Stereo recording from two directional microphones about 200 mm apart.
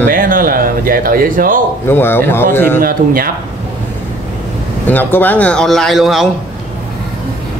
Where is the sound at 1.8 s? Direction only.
10° left (ahead or behind).